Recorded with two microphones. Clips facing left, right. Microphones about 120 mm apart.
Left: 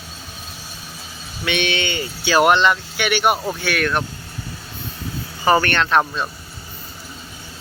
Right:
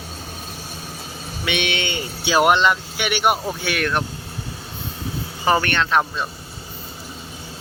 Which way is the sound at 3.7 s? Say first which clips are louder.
Left 2 dB; 20° right (ahead or behind).